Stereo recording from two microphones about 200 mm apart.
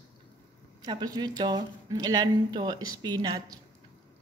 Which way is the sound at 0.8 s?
20° right (ahead or behind).